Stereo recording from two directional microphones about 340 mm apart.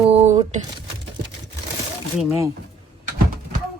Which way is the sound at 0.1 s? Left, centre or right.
Centre.